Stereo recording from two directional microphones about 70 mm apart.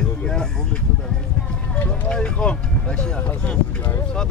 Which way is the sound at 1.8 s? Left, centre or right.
Centre.